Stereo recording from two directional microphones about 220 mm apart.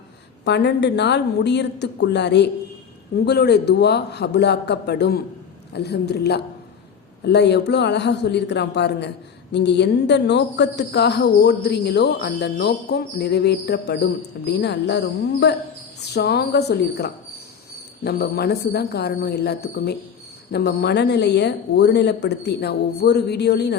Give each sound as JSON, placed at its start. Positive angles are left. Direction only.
{"t": 0.4, "sound": "a woman's voice", "side_deg": 50}